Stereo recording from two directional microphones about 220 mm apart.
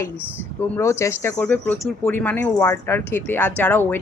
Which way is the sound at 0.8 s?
15° left (ahead or behind).